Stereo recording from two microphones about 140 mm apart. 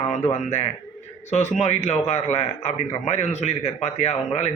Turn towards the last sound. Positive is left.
turn(degrees=55)  # may be behind; listen again after turning